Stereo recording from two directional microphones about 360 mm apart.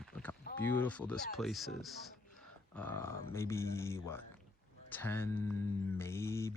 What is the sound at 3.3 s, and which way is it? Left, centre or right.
Speech, centre.